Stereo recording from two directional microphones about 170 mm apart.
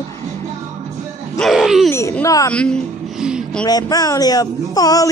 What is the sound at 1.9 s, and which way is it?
Speech, 15° left (ahead or behind).